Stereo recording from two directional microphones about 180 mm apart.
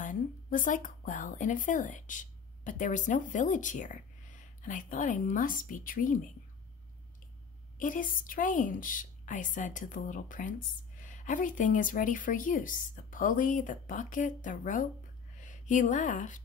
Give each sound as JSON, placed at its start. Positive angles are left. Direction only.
{"t": 0.0, "sound": "speech", "side_deg": 45}
{"t": 7.8, "sound": "a woman's voice", "side_deg": 50}